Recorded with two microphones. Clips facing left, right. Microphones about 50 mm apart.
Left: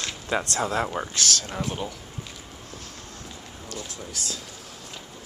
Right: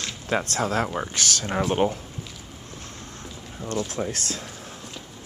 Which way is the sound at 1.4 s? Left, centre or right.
Right.